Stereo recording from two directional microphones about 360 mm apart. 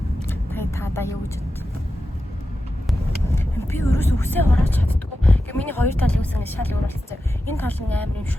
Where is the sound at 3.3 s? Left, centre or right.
Centre.